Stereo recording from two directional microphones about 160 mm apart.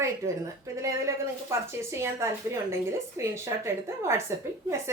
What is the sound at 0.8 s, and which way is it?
A woman's voice, 20° right (ahead or behind).